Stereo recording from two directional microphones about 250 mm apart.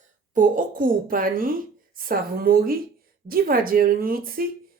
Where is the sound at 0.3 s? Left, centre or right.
Right.